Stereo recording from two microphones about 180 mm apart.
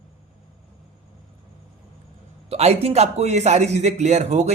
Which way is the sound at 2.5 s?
35° right (ahead or behind).